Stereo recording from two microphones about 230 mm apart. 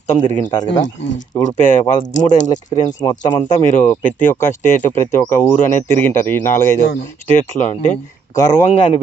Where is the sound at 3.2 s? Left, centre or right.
Left.